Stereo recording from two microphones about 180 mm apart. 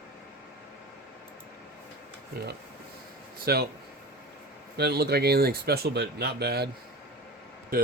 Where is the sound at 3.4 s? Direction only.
60° right (ahead or behind).